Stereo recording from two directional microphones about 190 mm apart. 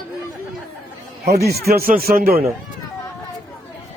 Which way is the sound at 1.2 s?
55° right (ahead or behind).